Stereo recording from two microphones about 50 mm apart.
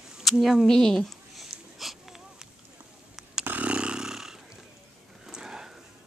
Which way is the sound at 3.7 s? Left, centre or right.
Centre.